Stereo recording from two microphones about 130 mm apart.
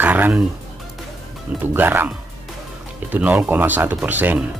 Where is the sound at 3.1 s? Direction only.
10° right (ahead or behind).